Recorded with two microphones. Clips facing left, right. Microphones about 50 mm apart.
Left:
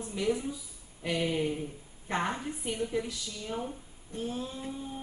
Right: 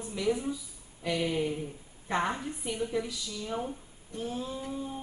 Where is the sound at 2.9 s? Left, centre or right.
Centre.